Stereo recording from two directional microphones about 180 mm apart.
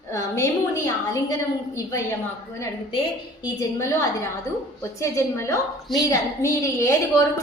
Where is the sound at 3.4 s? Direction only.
20° left (ahead or behind).